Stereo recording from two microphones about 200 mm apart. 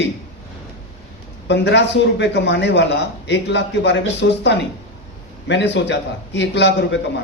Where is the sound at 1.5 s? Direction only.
60° left (ahead or behind).